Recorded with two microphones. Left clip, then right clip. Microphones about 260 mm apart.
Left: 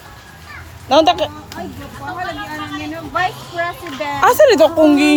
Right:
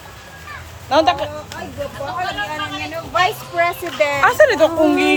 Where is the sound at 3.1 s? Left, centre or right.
Right.